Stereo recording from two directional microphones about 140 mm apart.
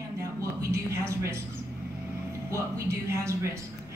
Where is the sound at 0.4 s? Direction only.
20° right (ahead or behind).